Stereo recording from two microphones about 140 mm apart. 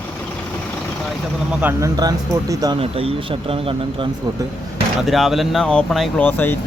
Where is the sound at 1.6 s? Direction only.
20° right (ahead or behind).